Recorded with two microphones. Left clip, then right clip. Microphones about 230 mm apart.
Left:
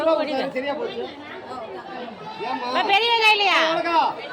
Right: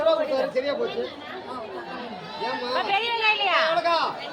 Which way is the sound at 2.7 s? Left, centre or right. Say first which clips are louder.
Left 6 dB; left.